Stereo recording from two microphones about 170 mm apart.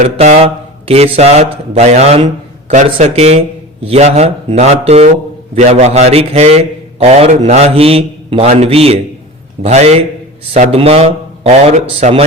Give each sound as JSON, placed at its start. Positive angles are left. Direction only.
{"t": 0.0, "sound": "a man's voice", "side_deg": -40}